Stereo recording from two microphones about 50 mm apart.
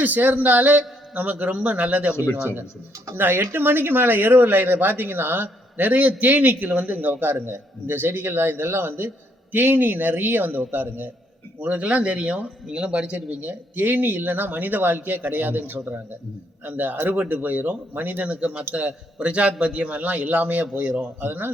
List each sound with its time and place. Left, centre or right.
0.0 s speech: right
2.1 s speech: left
3.2 s speech: right
11.6 s a man's voice: right
13.1 s speech: right
18.3 s a man's voice: right
21.2 s speech: right